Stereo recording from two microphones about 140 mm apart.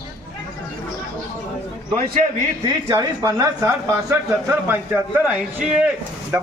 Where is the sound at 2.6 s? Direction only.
25° right (ahead or behind); by 5.9 s 10° right (ahead or behind).